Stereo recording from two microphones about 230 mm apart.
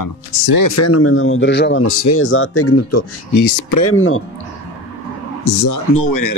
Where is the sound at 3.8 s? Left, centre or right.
Left.